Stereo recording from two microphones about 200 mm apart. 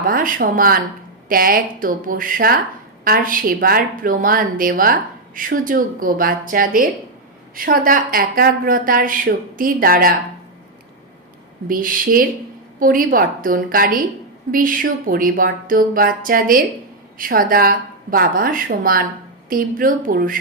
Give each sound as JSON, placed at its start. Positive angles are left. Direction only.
{"t": 0.1, "sound": "a woman's voice", "side_deg": -45}
{"t": 11.7, "sound": "a woman's voice", "side_deg": -45}